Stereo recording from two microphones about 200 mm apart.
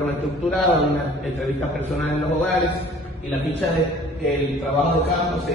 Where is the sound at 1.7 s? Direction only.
10° left (ahead or behind).